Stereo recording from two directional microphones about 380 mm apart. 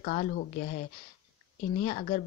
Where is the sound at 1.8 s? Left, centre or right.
Centre.